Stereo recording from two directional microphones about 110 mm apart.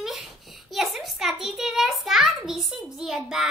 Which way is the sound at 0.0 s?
5° right (ahead or behind).